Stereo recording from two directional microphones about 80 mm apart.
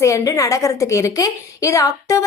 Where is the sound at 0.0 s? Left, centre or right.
Left.